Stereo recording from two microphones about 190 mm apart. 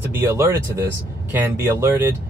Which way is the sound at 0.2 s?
10° right (ahead or behind).